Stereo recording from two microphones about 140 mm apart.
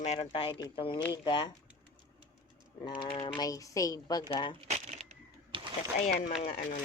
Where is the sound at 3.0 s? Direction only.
40° left (ahead or behind).